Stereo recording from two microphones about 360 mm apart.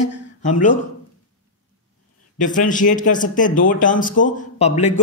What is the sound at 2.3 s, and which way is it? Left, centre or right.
Speech, left.